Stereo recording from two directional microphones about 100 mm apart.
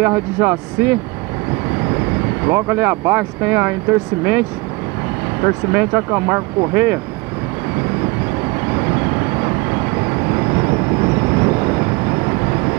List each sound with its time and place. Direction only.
0.0 s speech: 20° right (ahead or behind)
2.4 s speech: 20° right (ahead or behind)
8.5 s vehicle: 25° right (ahead or behind)